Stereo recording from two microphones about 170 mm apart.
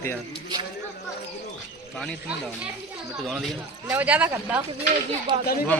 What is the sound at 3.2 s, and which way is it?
Speech, centre (ahead or behind).